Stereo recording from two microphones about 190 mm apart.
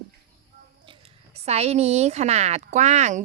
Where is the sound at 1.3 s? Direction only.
35° right (ahead or behind).